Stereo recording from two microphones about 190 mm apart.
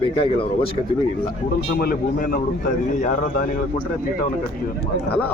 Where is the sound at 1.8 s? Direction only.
50° left (ahead or behind).